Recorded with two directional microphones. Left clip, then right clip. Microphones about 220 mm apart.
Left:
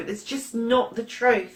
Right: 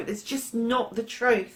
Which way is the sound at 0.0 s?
40° right (ahead or behind).